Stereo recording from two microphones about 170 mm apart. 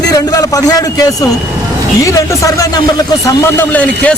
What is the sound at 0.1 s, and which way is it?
A man's voice, 20° left (ahead or behind).